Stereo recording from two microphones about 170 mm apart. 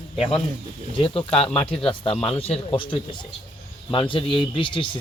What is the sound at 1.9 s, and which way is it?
Speech, 35° left (ahead or behind).